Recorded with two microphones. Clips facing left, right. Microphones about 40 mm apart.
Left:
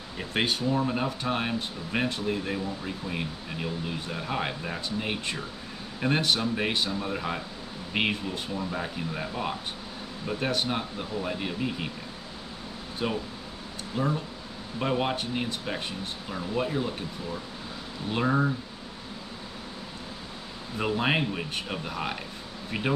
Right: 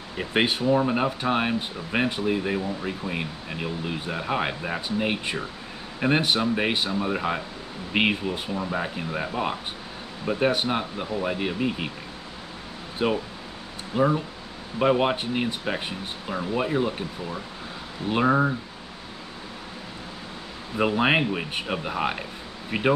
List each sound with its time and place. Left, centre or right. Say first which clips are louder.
0.2 s speech: right 4 dB; right
13.0 s speech: right 6 dB; centre
20.7 s speech: right 5 dB; right